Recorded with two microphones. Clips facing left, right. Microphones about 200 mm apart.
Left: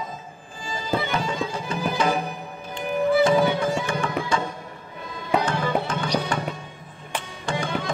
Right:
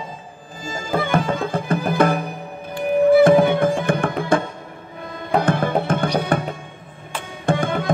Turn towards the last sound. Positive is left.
turn(degrees=-55)  # may be behind; listen again after turning